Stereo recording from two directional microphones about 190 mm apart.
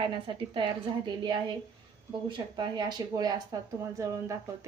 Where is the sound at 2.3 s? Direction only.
25° right (ahead or behind).